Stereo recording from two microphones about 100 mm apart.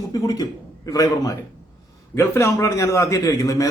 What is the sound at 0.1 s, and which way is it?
A man's voice, 40° left (ahead or behind).